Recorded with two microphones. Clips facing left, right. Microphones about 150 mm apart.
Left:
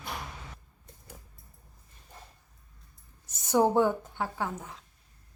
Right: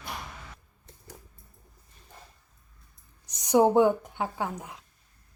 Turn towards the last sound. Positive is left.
turn(degrees=-15)  # may be behind; listen again after turning